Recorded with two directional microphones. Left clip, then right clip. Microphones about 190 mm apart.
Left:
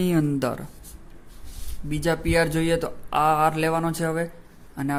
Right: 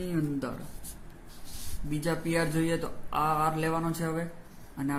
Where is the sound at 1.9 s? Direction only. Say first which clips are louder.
Left 7 dB; 40° left (ahead or behind).